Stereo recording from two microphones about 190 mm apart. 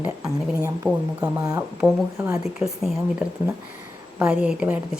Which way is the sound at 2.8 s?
Centre (ahead or behind).